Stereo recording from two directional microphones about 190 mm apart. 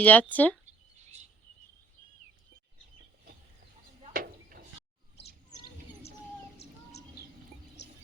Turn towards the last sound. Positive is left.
turn(degrees=60)  # may be behind; listen again after turning